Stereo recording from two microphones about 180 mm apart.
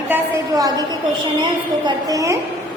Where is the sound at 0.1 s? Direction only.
20° right (ahead or behind).